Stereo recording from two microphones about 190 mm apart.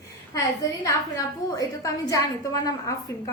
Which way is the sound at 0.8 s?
20° left (ahead or behind).